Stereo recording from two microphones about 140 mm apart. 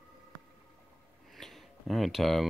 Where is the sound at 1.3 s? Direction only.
Centre (ahead or behind).